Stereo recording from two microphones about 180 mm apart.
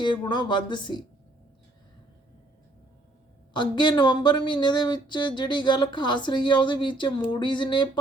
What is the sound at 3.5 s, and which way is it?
Speech, 25° left (ahead or behind).